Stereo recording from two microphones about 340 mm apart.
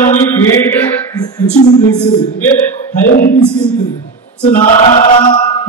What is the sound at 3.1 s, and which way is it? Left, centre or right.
Music, left.